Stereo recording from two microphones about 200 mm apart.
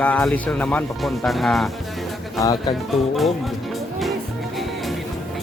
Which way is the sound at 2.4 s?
20° left (ahead or behind).